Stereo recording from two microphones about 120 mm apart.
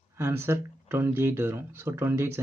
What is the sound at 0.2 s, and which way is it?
Speech, 20° right (ahead or behind).